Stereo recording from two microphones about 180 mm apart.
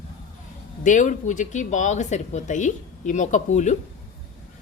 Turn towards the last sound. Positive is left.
turn(degrees=40)  # may be behind; listen again after turning